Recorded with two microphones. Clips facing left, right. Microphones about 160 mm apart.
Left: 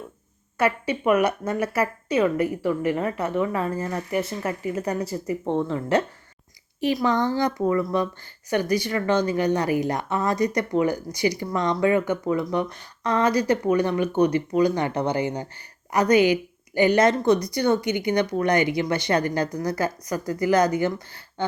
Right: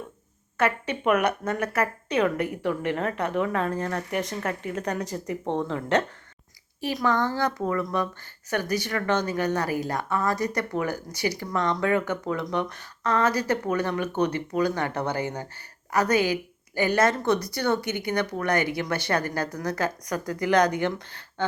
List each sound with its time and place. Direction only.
0.5 s a woman's voice: 10° left (ahead or behind)
6.8 s a woman's voice: 15° left (ahead or behind)